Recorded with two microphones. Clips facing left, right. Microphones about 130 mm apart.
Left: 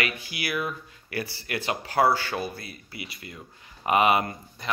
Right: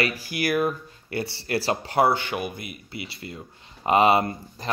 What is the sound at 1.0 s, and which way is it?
Speech, 30° right (ahead or behind).